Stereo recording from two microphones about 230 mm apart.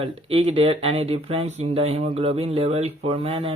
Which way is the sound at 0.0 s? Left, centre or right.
Right.